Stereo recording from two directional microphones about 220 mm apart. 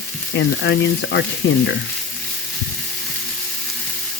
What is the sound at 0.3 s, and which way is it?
Speech, 55° left (ahead or behind).